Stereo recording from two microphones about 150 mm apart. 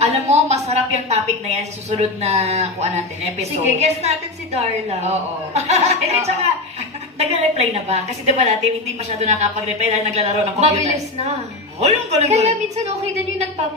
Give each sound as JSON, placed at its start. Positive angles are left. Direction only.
{"t": 0.0, "sound": "a woman's voice", "side_deg": -45}